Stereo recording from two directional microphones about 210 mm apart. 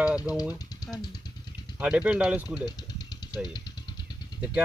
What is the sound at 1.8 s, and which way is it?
Speech, 5° right (ahead or behind).